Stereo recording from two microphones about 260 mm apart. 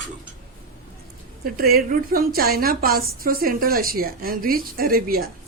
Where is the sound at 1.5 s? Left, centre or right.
Right.